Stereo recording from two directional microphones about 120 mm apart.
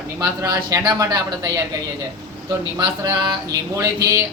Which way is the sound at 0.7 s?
30° right (ahead or behind).